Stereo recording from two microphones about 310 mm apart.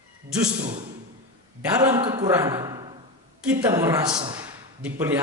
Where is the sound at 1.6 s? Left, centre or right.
Centre.